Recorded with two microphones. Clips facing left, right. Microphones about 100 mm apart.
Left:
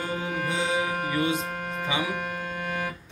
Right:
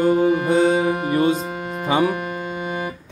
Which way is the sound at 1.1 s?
40° right (ahead or behind).